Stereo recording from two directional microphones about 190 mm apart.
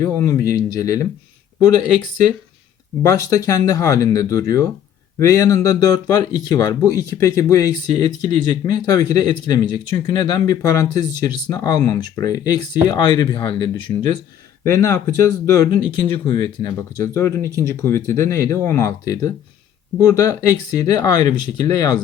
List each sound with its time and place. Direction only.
0.0 s speech: 15° left (ahead or behind)
3.0 s speech: 15° left (ahead or behind)